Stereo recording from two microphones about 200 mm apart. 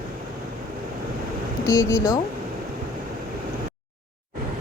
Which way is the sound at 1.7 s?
15° left (ahead or behind).